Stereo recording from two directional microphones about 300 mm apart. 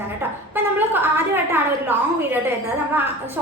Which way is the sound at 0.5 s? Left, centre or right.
Centre.